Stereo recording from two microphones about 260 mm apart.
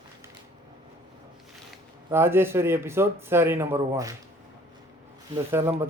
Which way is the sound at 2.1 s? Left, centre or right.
Centre.